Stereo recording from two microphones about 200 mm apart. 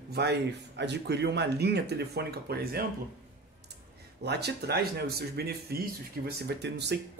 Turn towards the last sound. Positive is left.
turn(degrees=-60)  # may be behind; listen again after turning